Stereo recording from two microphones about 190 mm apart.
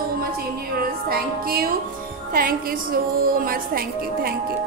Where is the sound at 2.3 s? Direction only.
50° right (ahead or behind).